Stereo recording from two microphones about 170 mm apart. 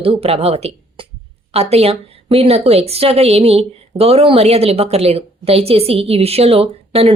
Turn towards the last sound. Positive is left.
turn(degrees=-35)  # may be behind; listen again after turning